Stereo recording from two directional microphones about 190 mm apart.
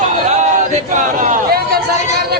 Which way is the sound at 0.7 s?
40° right (ahead or behind).